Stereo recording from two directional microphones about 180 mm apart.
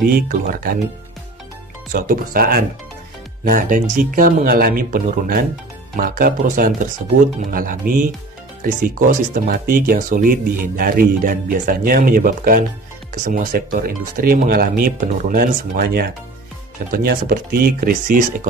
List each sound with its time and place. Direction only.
0.3 s speech: 55° right (ahead or behind)
1.9 s speech: 55° right (ahead or behind)